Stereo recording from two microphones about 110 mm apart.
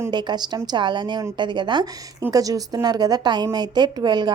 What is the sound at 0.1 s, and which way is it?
A woman's voice, 40° right (ahead or behind).